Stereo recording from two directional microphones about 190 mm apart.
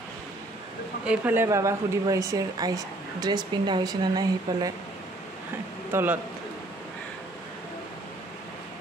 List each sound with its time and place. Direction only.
1.0 s a woman's voice: 10° right (ahead or behind)
5.9 s a man's voice: 10° right (ahead or behind)